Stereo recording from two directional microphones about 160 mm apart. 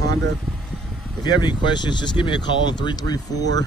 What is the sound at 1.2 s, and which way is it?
Speech, 30° left (ahead or behind).